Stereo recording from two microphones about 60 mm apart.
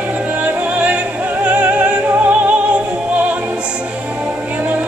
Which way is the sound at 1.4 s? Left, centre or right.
Right.